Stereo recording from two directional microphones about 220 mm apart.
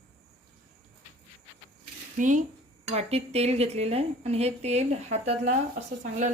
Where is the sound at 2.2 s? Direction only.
35° right (ahead or behind).